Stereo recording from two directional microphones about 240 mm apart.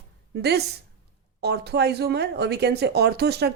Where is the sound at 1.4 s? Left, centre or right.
Right.